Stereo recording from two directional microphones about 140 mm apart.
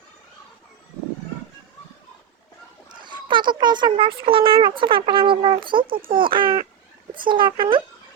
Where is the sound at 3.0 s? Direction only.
35° right (ahead or behind).